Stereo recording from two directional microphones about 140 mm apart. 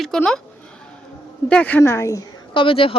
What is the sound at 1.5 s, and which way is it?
Speech, 10° left (ahead or behind).